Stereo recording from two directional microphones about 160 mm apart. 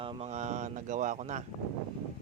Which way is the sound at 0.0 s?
35° right (ahead or behind).